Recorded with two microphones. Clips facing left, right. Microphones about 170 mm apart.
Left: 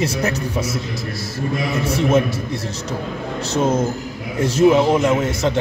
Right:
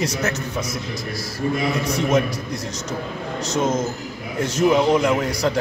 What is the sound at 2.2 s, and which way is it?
A man's voice, 25° left (ahead or behind).